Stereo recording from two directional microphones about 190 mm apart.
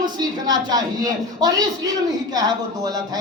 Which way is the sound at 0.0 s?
20° right (ahead or behind).